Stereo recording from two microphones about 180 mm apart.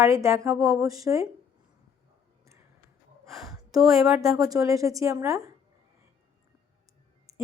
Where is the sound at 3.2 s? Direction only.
Centre (ahead or behind).